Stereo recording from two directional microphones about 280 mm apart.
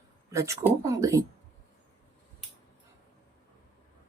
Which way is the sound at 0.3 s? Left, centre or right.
Centre.